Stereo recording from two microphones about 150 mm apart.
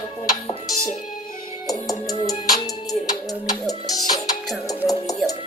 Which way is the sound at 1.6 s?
25° left (ahead or behind).